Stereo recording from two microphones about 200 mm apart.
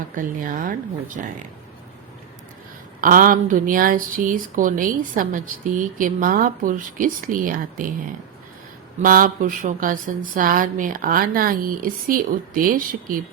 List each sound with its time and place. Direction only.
0.2 s a woman's voice: 45° right (ahead or behind)
3.0 s a woman's voice: 45° right (ahead or behind)
9.0 s a woman's voice: 45° right (ahead or behind)